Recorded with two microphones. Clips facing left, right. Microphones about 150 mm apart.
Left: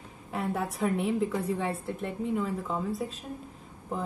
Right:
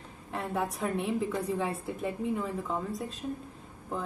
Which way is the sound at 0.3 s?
Centre (ahead or behind).